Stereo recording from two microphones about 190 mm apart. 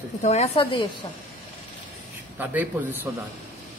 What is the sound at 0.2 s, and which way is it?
Speech, 35° left (ahead or behind).